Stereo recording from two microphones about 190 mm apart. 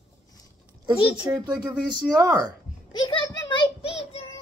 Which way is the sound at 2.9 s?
25° left (ahead or behind).